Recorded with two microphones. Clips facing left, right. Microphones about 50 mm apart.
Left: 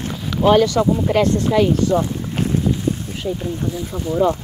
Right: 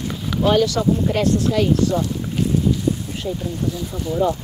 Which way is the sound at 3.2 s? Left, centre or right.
Centre.